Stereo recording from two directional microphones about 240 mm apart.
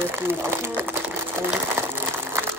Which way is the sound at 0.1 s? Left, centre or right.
Centre.